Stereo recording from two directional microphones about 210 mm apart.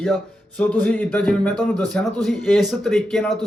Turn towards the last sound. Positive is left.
turn(degrees=0)  # may be behind; listen again after turning